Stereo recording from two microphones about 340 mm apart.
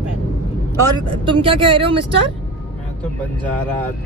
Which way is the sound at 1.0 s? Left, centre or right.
Centre.